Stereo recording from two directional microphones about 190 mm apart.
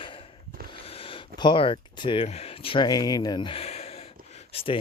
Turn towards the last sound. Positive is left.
turn(degrees=30)  # may be behind; listen again after turning